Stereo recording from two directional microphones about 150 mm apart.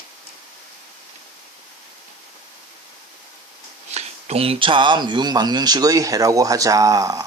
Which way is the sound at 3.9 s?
45° right (ahead or behind).